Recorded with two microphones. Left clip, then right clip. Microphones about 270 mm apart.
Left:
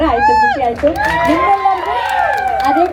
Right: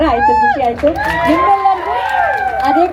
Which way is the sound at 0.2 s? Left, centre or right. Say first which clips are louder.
Even; centre.